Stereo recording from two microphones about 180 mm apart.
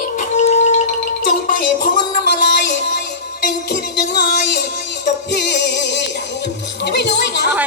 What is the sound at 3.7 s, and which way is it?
Music, 65° left (ahead or behind).